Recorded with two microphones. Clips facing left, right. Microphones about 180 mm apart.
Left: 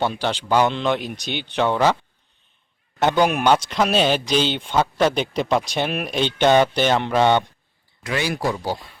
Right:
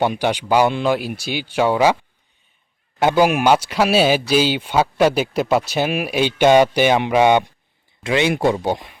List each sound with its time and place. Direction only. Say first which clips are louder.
0.0 s speech: right 4 dB; 15° right (ahead or behind)
3.0 s speech: right 3 dB; 10° right (ahead or behind)
8.0 s speech: right 6 dB; 20° right (ahead or behind)